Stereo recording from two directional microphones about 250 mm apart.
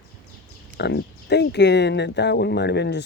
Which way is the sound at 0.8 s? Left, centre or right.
Left.